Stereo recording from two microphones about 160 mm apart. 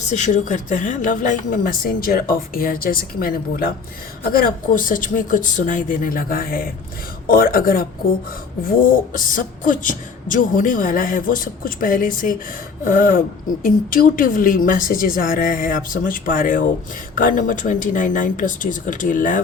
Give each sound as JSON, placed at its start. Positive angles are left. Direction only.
{"t": 0.1, "sound": "speech", "side_deg": 50}